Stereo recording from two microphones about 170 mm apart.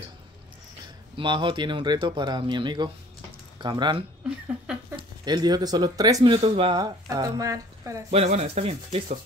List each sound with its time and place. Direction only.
1.1 s speech: 30° right (ahead or behind)
6.8 s speech: 20° right (ahead or behind)
8.1 s speech: 40° right (ahead or behind)